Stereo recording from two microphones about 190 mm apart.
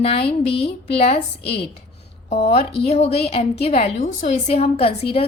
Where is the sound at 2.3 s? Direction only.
35° left (ahead or behind).